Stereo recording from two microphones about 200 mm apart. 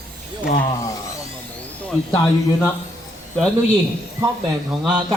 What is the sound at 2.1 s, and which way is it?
Speech, 20° left (ahead or behind).